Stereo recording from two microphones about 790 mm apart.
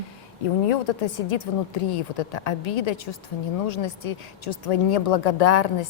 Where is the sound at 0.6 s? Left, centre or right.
Left.